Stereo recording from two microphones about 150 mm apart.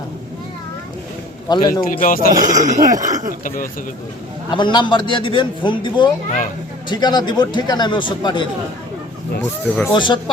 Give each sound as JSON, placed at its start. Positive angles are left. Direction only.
{"t": 1.5, "sound": "speech", "side_deg": 30}
{"t": 1.8, "sound": "speech", "side_deg": 65}
{"t": 2.4, "sound": "speech", "side_deg": -55}
{"t": 2.9, "sound": "speech", "side_deg": -25}
{"t": 3.4, "sound": "speech", "side_deg": 65}
{"t": 4.5, "sound": "a man's voice", "side_deg": 30}
{"t": 9.9, "sound": "a man's voice", "side_deg": 30}